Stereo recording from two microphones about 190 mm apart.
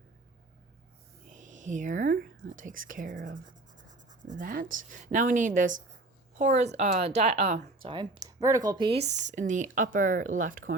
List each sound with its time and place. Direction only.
1.3 s speech: 40° right (ahead or behind); by 9.0 s 25° right (ahead or behind)
9.0 s speech: 40° right (ahead or behind)